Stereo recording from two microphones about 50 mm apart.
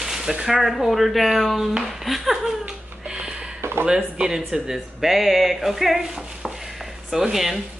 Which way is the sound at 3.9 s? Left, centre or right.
Centre.